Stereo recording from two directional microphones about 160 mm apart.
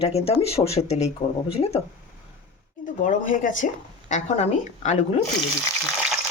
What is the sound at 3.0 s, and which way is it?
Speech, 55° left (ahead or behind).